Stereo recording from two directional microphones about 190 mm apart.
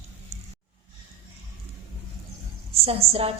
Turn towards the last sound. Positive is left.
turn(degrees=-30)  # may be behind; listen again after turning